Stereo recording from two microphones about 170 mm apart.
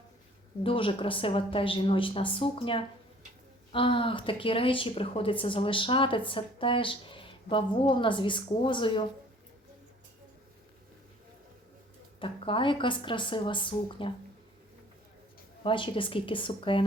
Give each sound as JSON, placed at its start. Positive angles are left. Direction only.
{"t": 0.6, "sound": "a woman's voice", "side_deg": 30}
{"t": 12.2, "sound": "speech", "side_deg": 30}
{"t": 15.6, "sound": "a woman's voice", "side_deg": 30}